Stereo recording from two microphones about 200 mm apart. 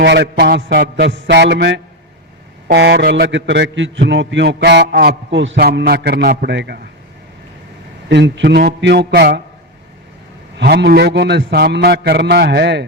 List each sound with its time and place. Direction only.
0.0 s a man's voice: 60° right (ahead or behind)
8.1 s a man's voice: 60° right (ahead or behind)
10.6 s a man's voice: 55° right (ahead or behind)